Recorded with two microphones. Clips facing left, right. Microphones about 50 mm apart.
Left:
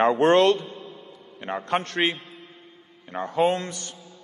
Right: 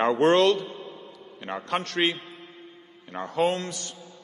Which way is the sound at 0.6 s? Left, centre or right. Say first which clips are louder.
Right 1 dB; centre.